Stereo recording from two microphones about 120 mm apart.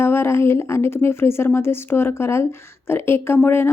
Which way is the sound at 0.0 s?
20° left (ahead or behind).